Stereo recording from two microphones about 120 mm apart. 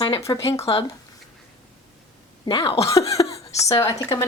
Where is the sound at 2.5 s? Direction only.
50° left (ahead or behind).